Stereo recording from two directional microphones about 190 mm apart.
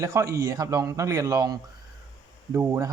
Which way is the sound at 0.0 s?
15° right (ahead or behind).